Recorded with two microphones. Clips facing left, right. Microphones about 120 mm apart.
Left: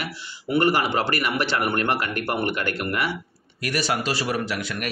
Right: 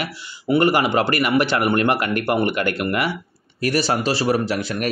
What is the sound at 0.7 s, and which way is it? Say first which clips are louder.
A man's voice: right 4 dB; 55° right (ahead or behind).